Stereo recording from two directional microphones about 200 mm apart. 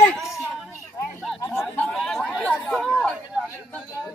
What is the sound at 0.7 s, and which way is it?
Music, 15° left (ahead or behind).